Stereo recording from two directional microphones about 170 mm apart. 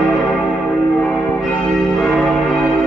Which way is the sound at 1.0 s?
5° left (ahead or behind).